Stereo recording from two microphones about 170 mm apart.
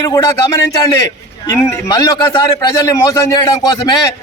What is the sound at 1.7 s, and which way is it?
A man's voice, 25° left (ahead or behind).